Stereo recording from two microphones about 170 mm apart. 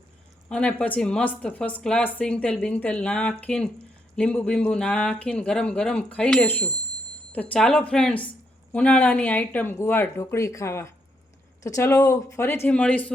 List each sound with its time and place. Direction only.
0.4 s speech: 5° left (ahead or behind)